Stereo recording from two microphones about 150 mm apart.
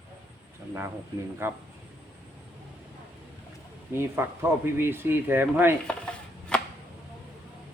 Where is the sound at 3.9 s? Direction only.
15° right (ahead or behind).